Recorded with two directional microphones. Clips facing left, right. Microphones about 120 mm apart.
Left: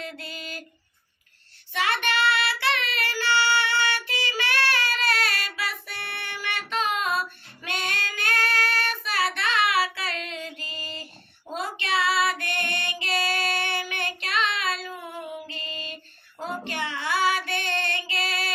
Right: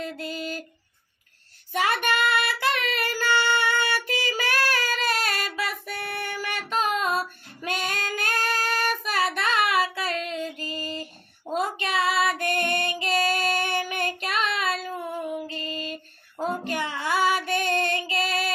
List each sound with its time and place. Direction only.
0.0 s a sound: 40° right (ahead or behind)
1.7 s child singing: 40° right (ahead or behind)
15.4 s female singing: 40° right (ahead or behind)